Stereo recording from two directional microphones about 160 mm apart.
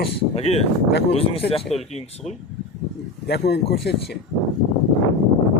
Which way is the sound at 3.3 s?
85° left.